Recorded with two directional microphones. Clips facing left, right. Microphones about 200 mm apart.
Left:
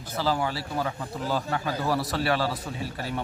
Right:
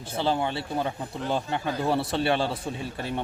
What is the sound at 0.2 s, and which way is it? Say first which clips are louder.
A man's voice: right 1 dB; 25° right (ahead or behind).